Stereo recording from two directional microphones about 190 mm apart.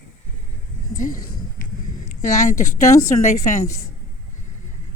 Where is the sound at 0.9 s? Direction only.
45° left (ahead or behind).